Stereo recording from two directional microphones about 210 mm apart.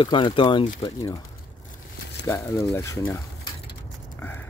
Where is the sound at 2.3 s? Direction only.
15° left (ahead or behind).